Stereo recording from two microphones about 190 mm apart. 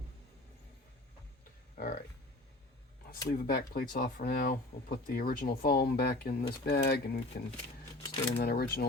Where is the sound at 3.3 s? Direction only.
50° left (ahead or behind).